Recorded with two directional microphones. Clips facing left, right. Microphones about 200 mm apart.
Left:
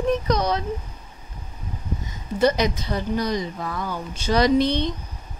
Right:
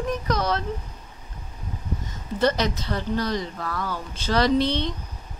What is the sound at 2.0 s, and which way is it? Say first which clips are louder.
Speech: left 3 dB; 10° left (ahead or behind).